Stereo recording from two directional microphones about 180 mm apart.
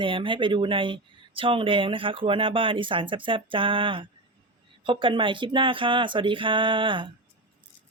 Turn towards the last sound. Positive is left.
turn(degrees=-25)  # may be behind; listen again after turning